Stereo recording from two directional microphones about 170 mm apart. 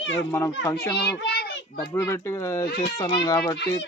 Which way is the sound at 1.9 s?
15° left (ahead or behind).